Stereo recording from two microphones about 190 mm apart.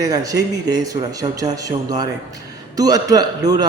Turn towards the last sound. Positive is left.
turn(degrees=-20)  # may be behind; listen again after turning